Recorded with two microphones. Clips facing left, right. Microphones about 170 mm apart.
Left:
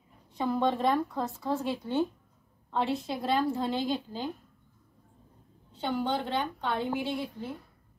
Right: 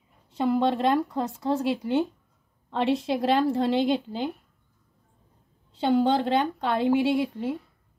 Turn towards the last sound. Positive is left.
turn(degrees=-90)